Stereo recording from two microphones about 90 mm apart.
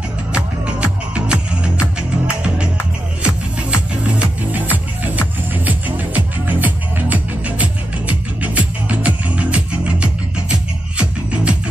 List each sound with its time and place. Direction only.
0.3 s music: 15° right (ahead or behind)